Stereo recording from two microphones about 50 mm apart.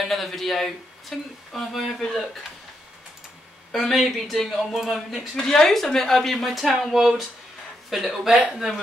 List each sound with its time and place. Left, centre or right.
0.1 s speech: centre
3.8 s speech: centre
5.3 s speech: centre